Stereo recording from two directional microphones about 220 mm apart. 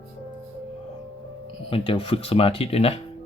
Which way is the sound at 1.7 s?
25° left (ahead or behind).